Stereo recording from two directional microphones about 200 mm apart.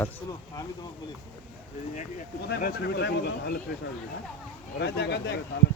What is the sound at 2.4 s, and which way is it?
Speech, 55° left (ahead or behind).